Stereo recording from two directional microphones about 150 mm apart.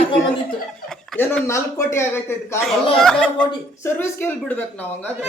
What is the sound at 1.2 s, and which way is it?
Speech, 15° left (ahead or behind).